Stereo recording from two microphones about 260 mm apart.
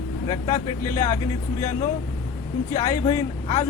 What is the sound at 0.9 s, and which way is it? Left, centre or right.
Speech, left.